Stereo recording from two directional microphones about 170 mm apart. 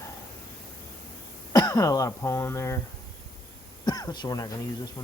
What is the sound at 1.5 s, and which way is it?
Speech, 20° left (ahead or behind).